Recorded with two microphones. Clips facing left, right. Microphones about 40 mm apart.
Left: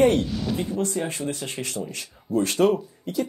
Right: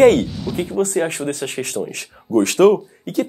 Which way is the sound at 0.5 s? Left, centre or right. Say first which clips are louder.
Right 9 dB; right.